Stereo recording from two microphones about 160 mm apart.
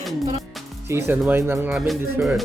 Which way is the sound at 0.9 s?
15° right (ahead or behind).